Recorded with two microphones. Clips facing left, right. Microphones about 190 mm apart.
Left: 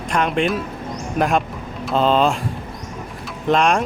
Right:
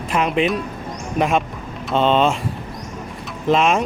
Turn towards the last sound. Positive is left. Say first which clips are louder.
# even
turn(degrees=0)  # may be behind; listen again after turning